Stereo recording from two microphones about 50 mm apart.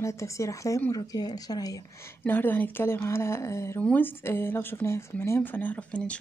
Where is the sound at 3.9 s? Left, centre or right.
Left.